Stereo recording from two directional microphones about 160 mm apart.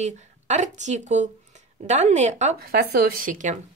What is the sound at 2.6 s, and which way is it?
Speech, 75° right (ahead or behind).